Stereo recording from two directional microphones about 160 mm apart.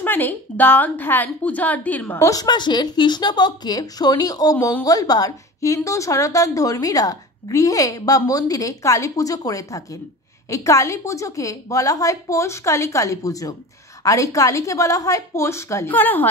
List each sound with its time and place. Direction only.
0.0 s a woman's voice: 10° left (ahead or behind)